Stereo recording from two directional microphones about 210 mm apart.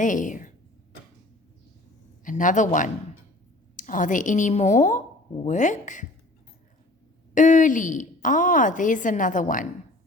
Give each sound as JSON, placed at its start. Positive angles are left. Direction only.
{"t": 0.0, "sound": "a woman's voice", "side_deg": 40}
{"t": 2.2, "sound": "a woman's voice", "side_deg": 35}
{"t": 7.3, "sound": "a woman's voice", "side_deg": 35}